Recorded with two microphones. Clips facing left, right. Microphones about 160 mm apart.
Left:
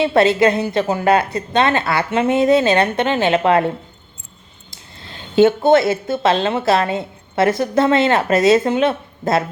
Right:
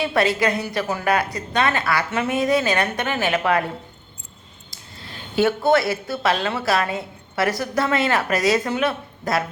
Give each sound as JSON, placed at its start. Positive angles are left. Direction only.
{"t": 0.0, "sound": "a woman's voice", "side_deg": 25}
{"t": 5.4, "sound": "a woman's voice", "side_deg": 25}